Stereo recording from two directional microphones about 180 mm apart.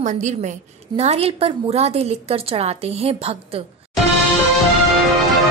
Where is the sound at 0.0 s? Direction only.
40° right (ahead or behind).